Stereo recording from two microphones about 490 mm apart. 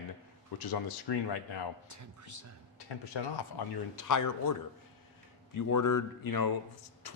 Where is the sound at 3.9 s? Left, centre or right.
Left.